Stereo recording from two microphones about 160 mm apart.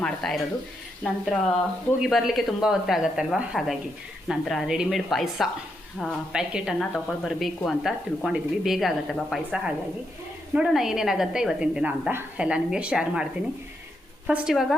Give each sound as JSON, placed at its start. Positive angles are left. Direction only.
{"t": 0.0, "sound": "speech", "side_deg": 0}
{"t": 14.3, "sound": "speech", "side_deg": -5}